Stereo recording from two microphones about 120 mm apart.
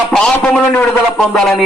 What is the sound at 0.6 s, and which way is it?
A man's voice, 15° left (ahead or behind).